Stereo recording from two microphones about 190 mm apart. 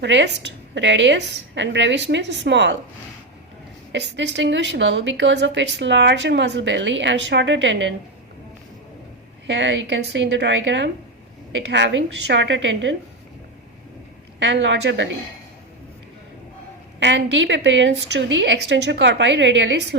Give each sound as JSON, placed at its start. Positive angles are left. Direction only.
{"t": 0.0, "sound": "a woman's voice", "side_deg": -70}
{"t": 3.9, "sound": "a woman's voice", "side_deg": -70}
{"t": 9.5, "sound": "a woman's voice", "side_deg": -70}
{"t": 14.3, "sound": "a woman's voice", "side_deg": -70}
{"t": 17.0, "sound": "a woman's voice", "side_deg": -70}